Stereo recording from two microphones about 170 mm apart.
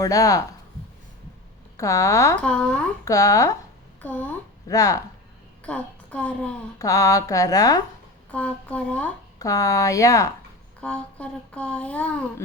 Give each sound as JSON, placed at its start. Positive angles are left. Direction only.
{"t": 0.0, "sound": "speech", "side_deg": 20}
{"t": 1.7, "sound": "speech", "side_deg": 20}
{"t": 2.4, "sound": "speech", "side_deg": 5}
{"t": 3.0, "sound": "a woman's voice", "side_deg": 20}
{"t": 5.6, "sound": "a woman's voice", "side_deg": 10}
{"t": 6.7, "sound": "speech", "side_deg": 20}
{"t": 8.3, "sound": "speech", "side_deg": 10}
{"t": 9.4, "sound": "speech", "side_deg": 20}
{"t": 10.8, "sound": "speech", "side_deg": 5}